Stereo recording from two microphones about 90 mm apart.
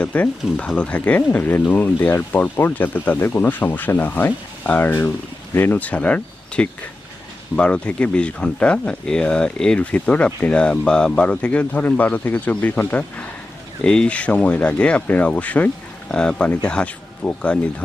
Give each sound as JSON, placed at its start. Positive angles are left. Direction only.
{"t": 0.0, "sound": "speech", "side_deg": 15}